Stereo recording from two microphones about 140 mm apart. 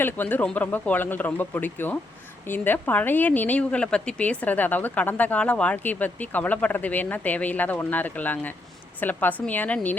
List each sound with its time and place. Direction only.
0.0 s speech: 15° left (ahead or behind)